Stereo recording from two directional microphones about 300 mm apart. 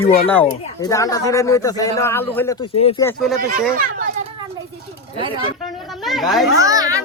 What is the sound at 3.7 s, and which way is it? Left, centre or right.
Speech, right.